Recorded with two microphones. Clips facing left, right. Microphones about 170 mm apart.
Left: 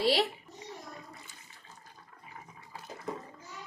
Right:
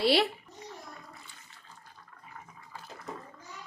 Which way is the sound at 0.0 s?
70° right (ahead or behind).